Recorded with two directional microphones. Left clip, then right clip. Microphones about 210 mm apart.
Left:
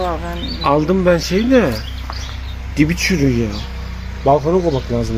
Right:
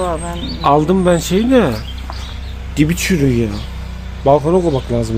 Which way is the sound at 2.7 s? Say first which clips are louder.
Even; 15° right (ahead or behind).